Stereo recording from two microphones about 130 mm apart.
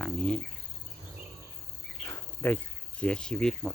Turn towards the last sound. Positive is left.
turn(degrees=5)  # may be behind; listen again after turning